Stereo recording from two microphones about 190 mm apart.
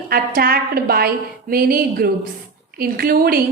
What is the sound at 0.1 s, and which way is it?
A woman's voice, 50° right (ahead or behind).